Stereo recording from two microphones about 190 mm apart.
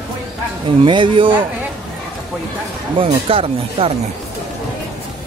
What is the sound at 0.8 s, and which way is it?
Speech, 25° right (ahead or behind).